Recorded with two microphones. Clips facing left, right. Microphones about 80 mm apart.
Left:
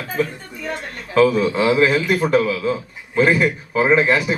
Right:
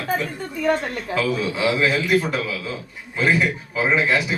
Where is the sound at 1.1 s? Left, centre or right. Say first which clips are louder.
Left 8 dB; left.